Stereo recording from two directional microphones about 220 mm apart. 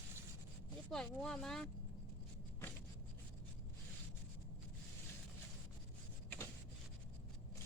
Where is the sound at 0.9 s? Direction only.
5° left (ahead or behind).